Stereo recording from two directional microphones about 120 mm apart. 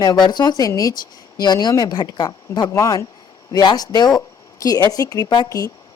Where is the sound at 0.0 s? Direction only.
35° left (ahead or behind).